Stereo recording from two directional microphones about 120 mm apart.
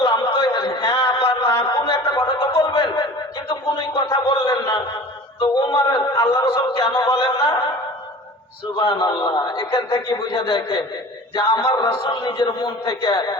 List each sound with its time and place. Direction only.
0.0 s a sound: 40° left (ahead or behind)
5.4 s speech: 40° left (ahead or behind)
8.7 s a man's voice: 40° left (ahead or behind)
9.7 s a man's voice: 45° left (ahead or behind)
11.3 s a sound: 40° left (ahead or behind)
12.0 s a man's voice: 40° left (ahead or behind)